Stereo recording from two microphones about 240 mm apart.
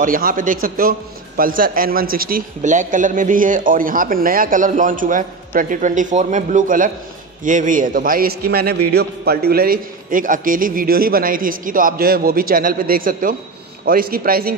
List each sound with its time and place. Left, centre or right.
0.0 s a man's voice: right